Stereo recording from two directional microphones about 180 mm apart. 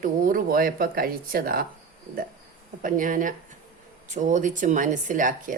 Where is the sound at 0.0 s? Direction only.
50° right (ahead or behind).